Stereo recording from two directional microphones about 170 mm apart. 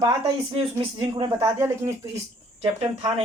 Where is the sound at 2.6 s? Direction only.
30° right (ahead or behind).